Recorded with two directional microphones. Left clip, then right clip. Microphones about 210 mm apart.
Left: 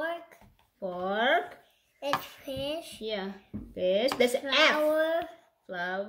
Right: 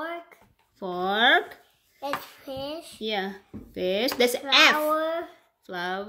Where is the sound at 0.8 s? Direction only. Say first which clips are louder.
Right 6 dB; 45° right (ahead or behind).